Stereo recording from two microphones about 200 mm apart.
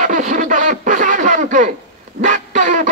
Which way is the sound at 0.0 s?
40° right (ahead or behind).